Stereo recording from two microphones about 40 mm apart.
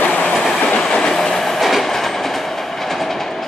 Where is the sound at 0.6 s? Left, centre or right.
Centre.